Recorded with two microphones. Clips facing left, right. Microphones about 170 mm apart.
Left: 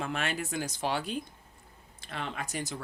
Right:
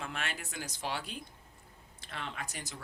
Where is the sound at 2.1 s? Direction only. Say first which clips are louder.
Left 5 dB; 60° left (ahead or behind).